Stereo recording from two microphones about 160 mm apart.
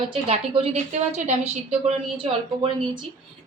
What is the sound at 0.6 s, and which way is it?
A woman's voice, 40° right (ahead or behind).